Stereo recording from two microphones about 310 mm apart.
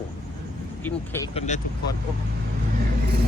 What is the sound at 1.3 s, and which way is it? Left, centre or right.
Speech, left.